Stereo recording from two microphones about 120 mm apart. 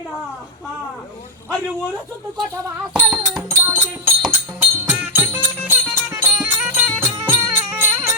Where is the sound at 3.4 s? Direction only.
20° right (ahead or behind).